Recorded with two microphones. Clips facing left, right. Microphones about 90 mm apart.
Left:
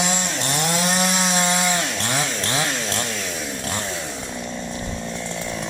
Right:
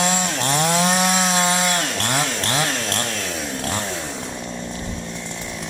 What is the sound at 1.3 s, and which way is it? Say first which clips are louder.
Chainsaw: right 1 dB; 25° right (ahead or behind).